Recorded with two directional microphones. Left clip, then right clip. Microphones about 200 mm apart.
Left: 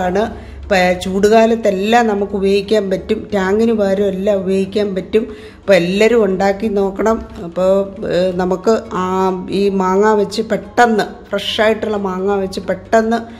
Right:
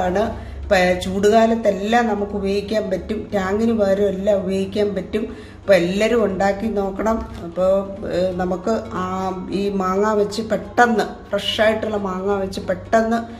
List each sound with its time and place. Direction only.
0.0 s speech: 30° left (ahead or behind)